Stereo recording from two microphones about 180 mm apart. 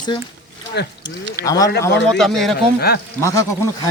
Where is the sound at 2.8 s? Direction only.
60° left (ahead or behind).